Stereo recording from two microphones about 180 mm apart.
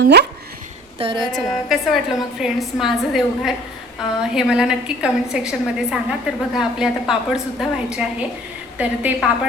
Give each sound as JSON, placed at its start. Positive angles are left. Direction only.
{"t": 0.0, "sound": "speech", "side_deg": -65}
{"t": 0.9, "sound": "a woman's voice", "side_deg": -30}
{"t": 1.7, "sound": "a woman's voice", "side_deg": 0}